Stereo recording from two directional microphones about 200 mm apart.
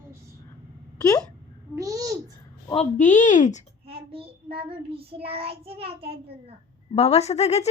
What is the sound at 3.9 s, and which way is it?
Child singing, 30° right (ahead or behind).